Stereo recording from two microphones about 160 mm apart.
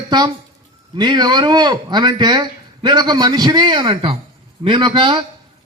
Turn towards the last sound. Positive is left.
turn(degrees=-30)  # may be behind; listen again after turning